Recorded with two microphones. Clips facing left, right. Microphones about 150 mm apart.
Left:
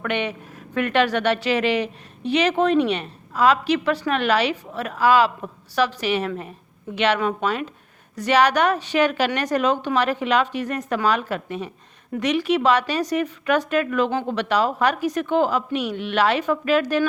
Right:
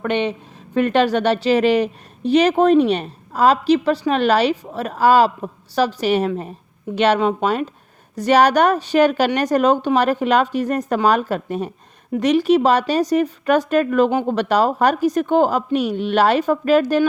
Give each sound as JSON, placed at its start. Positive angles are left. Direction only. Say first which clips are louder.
{"t": 0.0, "sound": "speech", "louder": "right 5 dB", "side_deg": -30}